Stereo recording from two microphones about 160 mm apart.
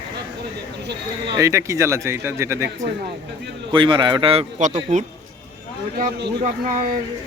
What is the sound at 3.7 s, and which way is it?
Speech, 30° right (ahead or behind).